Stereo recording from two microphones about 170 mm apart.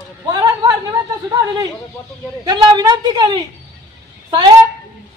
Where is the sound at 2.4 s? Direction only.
25° right (ahead or behind).